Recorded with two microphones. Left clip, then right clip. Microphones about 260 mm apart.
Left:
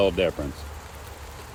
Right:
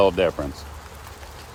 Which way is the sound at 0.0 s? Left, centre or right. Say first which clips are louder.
Right 4 dB; centre.